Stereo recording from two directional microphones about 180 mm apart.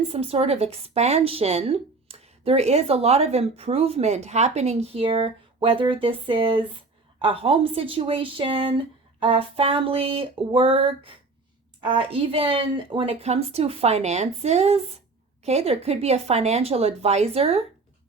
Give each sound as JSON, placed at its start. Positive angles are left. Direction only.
{"t": 0.1, "sound": "a woman's voice", "side_deg": -35}